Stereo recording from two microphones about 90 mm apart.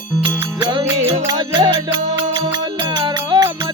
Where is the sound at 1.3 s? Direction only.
50° right (ahead or behind).